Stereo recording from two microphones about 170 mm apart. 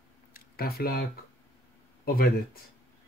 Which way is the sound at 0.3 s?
60° left (ahead or behind).